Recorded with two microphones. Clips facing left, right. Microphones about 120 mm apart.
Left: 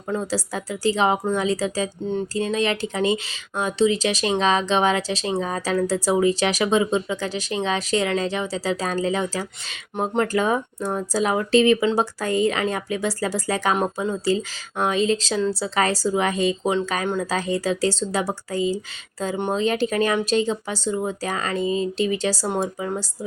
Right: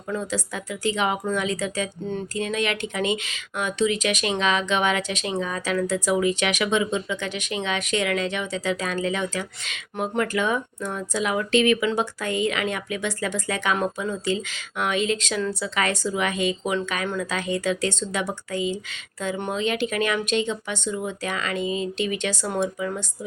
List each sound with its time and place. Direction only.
0.1 s speech: 35° left (ahead or behind)